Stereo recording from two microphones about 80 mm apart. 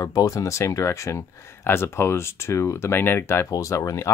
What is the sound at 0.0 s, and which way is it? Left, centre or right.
Speech, left.